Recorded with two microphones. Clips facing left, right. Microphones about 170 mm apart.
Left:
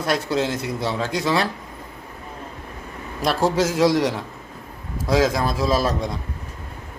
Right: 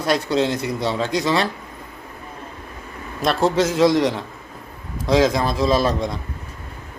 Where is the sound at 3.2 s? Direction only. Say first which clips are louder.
Right 2 dB; 10° left (ahead or behind).